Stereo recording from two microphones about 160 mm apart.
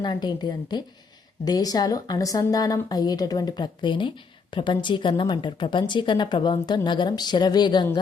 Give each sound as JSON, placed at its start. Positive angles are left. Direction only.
{"t": 0.0, "sound": "a woman's voice", "side_deg": 30}